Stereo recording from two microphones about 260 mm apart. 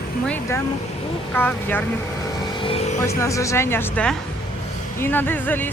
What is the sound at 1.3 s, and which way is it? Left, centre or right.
Speech, centre.